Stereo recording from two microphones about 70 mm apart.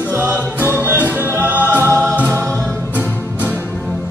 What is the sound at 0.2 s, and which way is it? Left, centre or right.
Music, right.